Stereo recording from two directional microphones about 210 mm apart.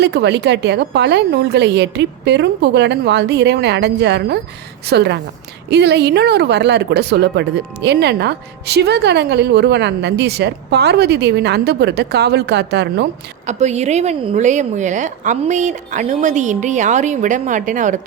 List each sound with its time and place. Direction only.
0.0 s speech: 55° right (ahead or behind)
13.5 s a woman's voice: 30° right (ahead or behind)